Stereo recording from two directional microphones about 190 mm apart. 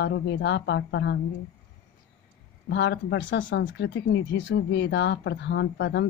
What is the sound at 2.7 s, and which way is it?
Speech, 65° left (ahead or behind).